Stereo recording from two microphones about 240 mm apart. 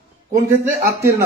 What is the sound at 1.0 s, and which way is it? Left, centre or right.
Speech, centre.